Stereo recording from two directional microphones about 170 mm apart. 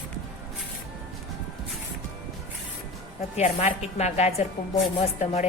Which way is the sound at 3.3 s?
40° left (ahead or behind).